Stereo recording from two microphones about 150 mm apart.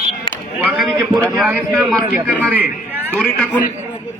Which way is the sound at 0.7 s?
5° right (ahead or behind).